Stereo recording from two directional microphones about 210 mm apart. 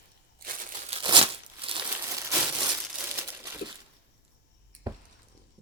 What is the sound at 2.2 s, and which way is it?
Crumpling, 15° right (ahead or behind).